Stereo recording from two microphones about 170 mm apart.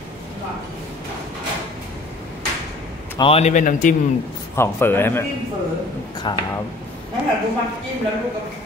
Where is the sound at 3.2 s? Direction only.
35° left (ahead or behind).